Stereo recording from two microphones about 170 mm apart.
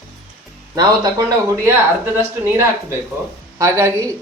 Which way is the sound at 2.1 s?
15° right (ahead or behind).